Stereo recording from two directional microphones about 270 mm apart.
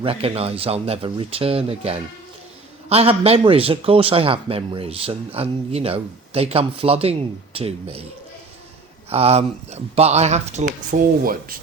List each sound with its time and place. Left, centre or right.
0.0 s a man's voice: right
9.0 s a man's voice: right